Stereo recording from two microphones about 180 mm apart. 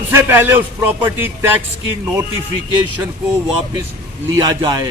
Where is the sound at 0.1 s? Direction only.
15° right (ahead or behind).